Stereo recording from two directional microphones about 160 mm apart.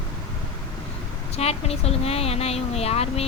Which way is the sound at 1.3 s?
40° left (ahead or behind).